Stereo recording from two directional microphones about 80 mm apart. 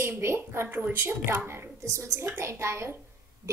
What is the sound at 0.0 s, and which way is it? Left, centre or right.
A woman's voice, right.